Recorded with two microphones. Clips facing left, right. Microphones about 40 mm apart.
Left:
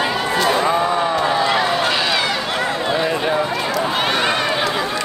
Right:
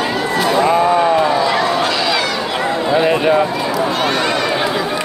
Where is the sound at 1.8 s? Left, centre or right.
Centre.